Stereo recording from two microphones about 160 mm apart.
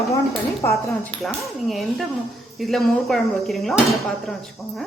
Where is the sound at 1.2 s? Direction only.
Centre (ahead or behind).